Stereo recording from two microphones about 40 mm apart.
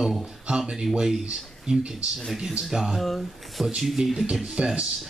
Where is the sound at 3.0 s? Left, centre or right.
Centre.